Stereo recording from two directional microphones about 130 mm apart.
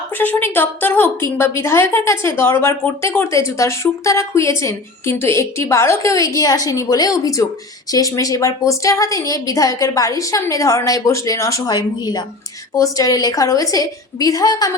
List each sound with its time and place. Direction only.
0.2 s a woman's voice: 15° left (ahead or behind)